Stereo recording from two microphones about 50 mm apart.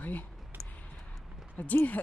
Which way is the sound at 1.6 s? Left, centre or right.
Left.